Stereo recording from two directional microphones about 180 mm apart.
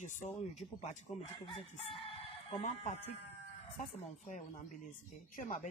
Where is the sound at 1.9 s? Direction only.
30° left (ahead or behind).